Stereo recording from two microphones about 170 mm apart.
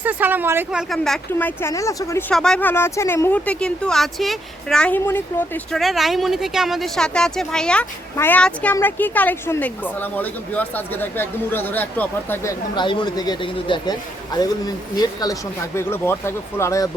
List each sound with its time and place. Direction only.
0.0 s speech: 10° right (ahead or behind); by 2.2 s 20° left (ahead or behind)
2.3 s speech: 5° left (ahead or behind)
5.7 s speech: centre (ahead or behind); by 16.9 s 15° left (ahead or behind)